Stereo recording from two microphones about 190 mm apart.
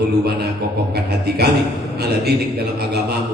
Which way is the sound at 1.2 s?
55° right (ahead or behind).